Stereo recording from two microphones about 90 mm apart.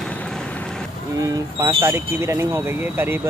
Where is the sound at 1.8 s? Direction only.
35° right (ahead or behind).